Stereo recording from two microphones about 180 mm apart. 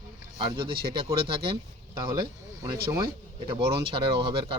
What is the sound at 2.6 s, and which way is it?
Speech, 20° right (ahead or behind).